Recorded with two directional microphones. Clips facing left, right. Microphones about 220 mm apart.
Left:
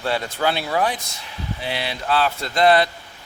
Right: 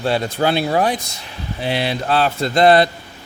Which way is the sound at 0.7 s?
40° right (ahead or behind).